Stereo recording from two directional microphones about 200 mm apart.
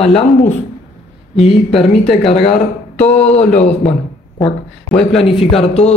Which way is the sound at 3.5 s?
35° left (ahead or behind).